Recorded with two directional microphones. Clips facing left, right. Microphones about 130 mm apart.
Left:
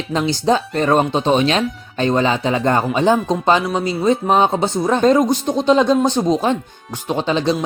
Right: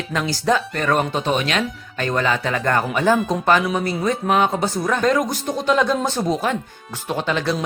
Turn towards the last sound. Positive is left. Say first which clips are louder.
# left 4 dB
turn(degrees=20)  # may be behind; listen again after turning